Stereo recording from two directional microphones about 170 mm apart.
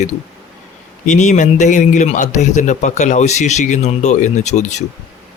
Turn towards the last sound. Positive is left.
turn(degrees=45)  # may be behind; listen again after turning